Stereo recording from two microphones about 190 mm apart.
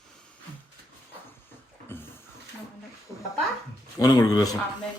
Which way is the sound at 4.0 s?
20° left (ahead or behind).